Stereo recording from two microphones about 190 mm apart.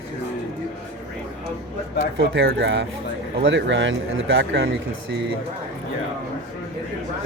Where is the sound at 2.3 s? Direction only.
70° right (ahead or behind).